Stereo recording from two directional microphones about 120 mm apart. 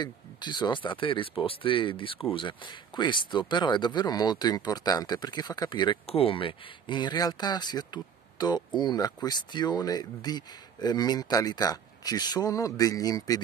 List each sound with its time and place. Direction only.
0.0 s speech: 40° left (ahead or behind)
6.0 s speech: 55° left (ahead or behind); by 13.4 s 30° left (ahead or behind)